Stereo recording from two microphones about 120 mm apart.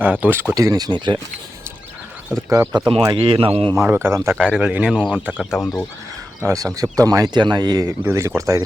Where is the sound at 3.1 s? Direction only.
45° right (ahead or behind).